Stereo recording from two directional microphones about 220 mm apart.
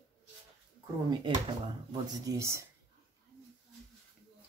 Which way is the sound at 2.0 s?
15° right (ahead or behind).